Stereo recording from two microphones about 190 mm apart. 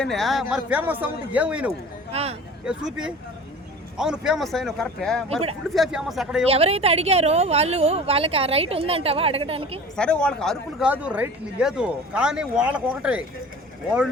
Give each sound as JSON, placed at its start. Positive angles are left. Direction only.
{"t": 0.0, "sound": "a man's voice", "side_deg": 0}
{"t": 2.1, "sound": "a woman's voice", "side_deg": -30}
{"t": 2.6, "sound": "speech", "side_deg": -5}
{"t": 6.5, "sound": "a woman's voice", "side_deg": -30}
{"t": 9.9, "sound": "speech", "side_deg": 5}